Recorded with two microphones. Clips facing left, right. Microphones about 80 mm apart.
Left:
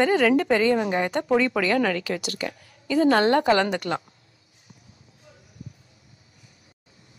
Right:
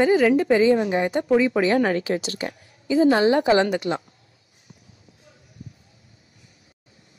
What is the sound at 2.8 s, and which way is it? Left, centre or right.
Speech, centre.